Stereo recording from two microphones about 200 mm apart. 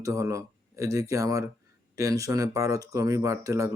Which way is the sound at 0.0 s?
15° right (ahead or behind).